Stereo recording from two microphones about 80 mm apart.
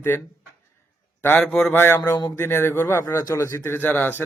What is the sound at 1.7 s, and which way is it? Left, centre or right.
Speech, left.